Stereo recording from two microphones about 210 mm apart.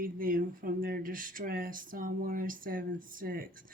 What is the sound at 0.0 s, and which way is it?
Speech, 40° right (ahead or behind).